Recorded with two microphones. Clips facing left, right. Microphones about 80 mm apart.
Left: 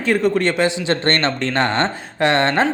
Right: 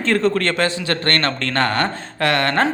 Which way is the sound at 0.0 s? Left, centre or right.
Centre.